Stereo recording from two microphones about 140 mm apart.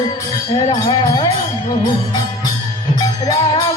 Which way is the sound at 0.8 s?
25° left (ahead or behind).